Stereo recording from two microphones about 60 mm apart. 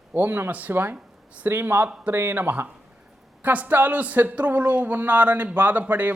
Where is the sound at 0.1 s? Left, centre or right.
Right.